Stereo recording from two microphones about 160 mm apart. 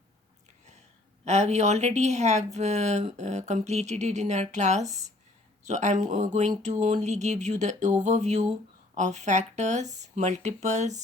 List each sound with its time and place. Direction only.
1.2 s speech: 45° right (ahead or behind)